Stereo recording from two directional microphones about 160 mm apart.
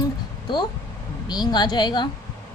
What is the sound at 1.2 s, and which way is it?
Speech, 25° left (ahead or behind).